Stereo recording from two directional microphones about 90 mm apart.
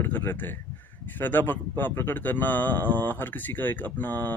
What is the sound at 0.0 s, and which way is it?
Speech, 25° left (ahead or behind).